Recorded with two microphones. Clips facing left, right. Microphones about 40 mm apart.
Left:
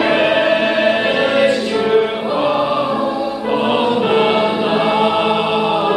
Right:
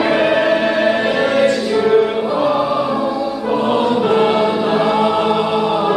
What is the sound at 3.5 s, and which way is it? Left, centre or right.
Choir, left.